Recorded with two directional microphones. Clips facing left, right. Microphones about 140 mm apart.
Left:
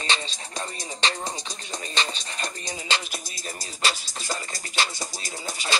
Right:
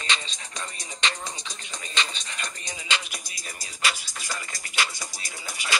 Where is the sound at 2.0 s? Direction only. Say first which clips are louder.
Left 2 dB; 35° left (ahead or behind).